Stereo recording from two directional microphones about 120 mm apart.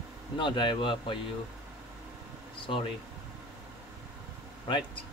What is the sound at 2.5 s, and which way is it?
Speech, 45° left (ahead or behind).